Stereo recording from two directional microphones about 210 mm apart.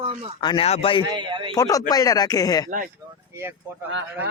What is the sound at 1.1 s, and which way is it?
Speech, 20° right (ahead or behind).